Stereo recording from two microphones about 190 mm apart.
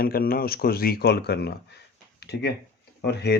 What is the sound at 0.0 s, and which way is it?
Speech, 50° left (ahead or behind).